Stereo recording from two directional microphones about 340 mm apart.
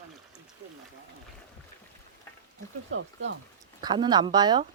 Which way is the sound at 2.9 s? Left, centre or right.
Right.